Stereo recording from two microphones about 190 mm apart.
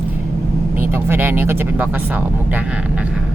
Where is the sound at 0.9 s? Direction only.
10° right (ahead or behind).